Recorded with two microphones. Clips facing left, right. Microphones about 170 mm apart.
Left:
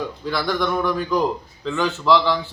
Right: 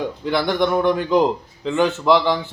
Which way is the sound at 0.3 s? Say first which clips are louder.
Right 4 dB; 20° right (ahead or behind).